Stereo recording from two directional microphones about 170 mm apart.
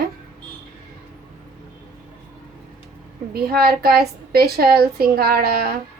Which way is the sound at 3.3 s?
65° right (ahead or behind).